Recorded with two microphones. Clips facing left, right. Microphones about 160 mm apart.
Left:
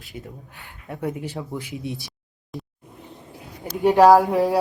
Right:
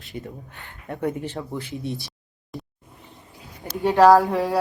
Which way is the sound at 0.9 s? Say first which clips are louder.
Right 2 dB; centre (ahead or behind).